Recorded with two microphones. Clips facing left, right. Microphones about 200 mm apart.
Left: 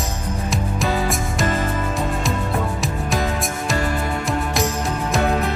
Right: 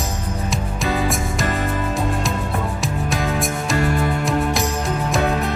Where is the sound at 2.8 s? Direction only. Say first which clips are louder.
Even; centre (ahead or behind).